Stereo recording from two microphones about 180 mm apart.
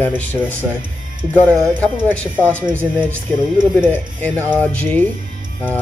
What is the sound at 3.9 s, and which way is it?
Speech, 10° left (ahead or behind).